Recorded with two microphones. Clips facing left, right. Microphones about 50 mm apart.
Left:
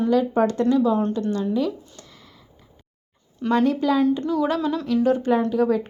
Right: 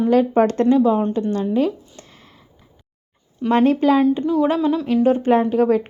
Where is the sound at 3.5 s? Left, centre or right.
Right.